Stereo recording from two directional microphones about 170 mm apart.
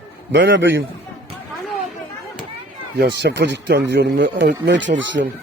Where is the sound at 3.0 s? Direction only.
85° right.